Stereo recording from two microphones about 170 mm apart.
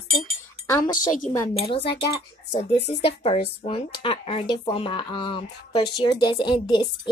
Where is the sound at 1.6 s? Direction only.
35° left (ahead or behind).